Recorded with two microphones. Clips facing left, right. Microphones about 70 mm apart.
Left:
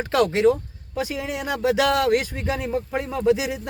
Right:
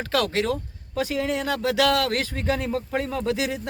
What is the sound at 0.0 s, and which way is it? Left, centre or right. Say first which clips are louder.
Speech: left 6 dB; left.